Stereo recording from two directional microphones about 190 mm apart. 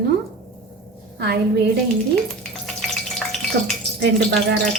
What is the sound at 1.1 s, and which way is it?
Speech, 60° right (ahead or behind).